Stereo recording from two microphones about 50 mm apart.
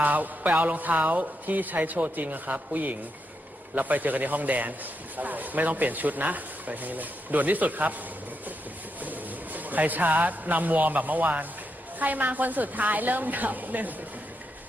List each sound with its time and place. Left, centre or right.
0.0 s a man's voice: right
9.0 s a man's voice: right